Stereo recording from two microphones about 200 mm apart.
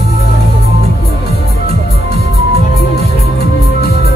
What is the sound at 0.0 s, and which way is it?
Music, 55° left (ahead or behind).